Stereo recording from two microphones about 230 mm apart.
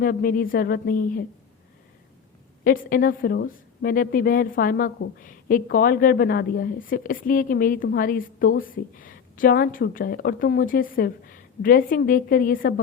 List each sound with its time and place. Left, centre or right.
0.0 s speech: left
2.6 s speech: left